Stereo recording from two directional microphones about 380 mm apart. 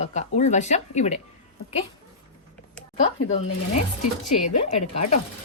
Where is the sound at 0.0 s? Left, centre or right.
Centre.